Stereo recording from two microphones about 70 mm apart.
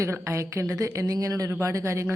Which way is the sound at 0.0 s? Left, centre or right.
Right.